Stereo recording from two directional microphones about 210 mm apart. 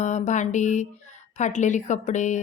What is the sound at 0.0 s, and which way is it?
A woman's voice, 35° left (ahead or behind).